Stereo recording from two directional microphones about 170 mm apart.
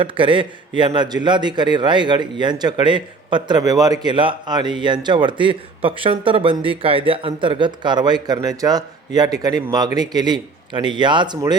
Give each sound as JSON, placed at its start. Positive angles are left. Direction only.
{"t": 0.0, "sound": "speech", "side_deg": -30}